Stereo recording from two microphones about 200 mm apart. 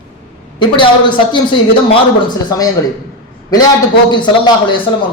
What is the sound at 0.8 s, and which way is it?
Speech, 25° left (ahead or behind).